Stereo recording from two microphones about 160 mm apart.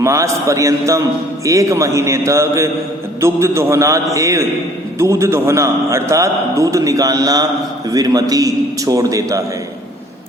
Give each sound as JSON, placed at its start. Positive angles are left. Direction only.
{"t": 0.0, "sound": "a man's voice", "side_deg": -20}